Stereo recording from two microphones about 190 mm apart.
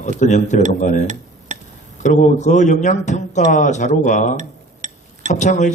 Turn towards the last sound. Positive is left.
turn(degrees=40)  # may be behind; listen again after turning